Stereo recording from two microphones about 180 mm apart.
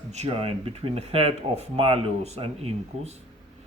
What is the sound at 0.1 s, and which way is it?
Speech, 35° right (ahead or behind).